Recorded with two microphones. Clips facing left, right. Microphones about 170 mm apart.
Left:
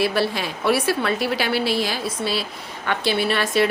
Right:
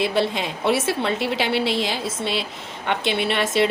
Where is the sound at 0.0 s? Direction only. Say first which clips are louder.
Even; 20° right (ahead or behind).